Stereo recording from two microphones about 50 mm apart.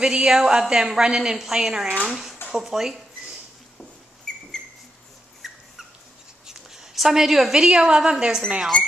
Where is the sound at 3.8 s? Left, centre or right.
Centre.